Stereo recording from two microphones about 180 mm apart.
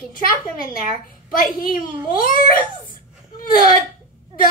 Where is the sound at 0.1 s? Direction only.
55° left (ahead or behind).